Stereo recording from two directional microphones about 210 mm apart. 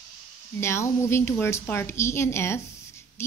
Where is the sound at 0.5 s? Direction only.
10° left (ahead or behind).